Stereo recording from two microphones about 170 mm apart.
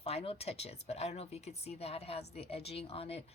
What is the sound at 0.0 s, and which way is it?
Speech, 35° left (ahead or behind).